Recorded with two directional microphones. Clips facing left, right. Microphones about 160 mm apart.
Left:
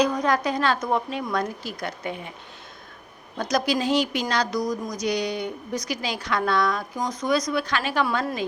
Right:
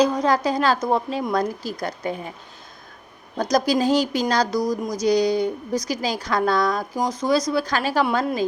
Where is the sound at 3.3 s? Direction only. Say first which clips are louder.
Right 4 dB; 40° right (ahead or behind).